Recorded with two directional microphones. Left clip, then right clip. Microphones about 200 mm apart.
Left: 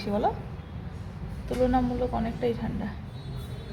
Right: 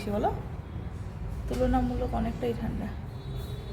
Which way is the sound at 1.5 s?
15° left (ahead or behind).